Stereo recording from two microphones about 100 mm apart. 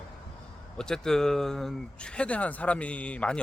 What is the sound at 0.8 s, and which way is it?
Speech, 5° left (ahead or behind).